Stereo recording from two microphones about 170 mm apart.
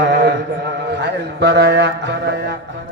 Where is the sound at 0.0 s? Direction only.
85° right.